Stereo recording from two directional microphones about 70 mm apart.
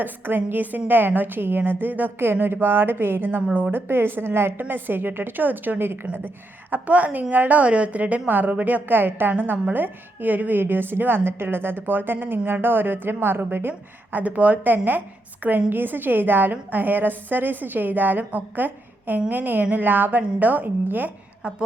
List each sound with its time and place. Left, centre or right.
0.0 s a woman's voice: right